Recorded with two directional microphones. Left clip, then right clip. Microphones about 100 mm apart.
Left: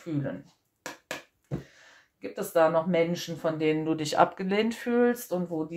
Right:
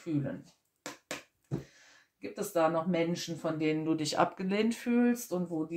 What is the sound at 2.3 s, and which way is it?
Speech, 25° left (ahead or behind).